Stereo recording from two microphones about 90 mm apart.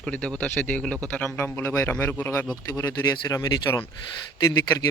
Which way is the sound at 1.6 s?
30° left (ahead or behind).